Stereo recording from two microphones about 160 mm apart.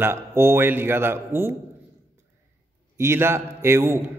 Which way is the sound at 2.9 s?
15° right (ahead or behind).